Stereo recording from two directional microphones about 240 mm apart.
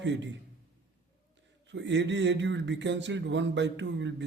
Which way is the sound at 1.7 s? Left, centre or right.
Right.